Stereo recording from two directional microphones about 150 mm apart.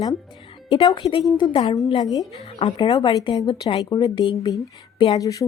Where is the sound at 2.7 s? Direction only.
30° left (ahead or behind).